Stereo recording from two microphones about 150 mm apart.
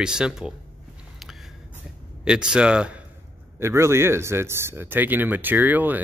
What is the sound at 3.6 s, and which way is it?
Speech, 20° right (ahead or behind).